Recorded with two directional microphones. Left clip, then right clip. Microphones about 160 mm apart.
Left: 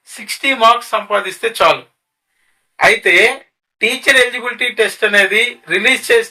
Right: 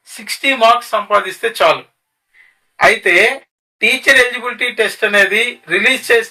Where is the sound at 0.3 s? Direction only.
20° left (ahead or behind).